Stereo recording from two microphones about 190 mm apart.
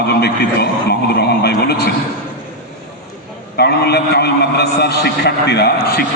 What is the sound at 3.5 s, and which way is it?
A man's voice, 60° left (ahead or behind).